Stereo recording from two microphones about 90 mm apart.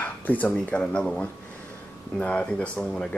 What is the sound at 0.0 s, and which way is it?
Dishes, 20° left (ahead or behind).